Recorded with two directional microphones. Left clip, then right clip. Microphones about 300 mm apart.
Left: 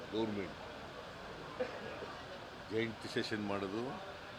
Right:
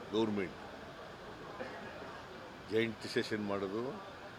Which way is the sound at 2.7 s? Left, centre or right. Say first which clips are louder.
Right 4 dB; centre.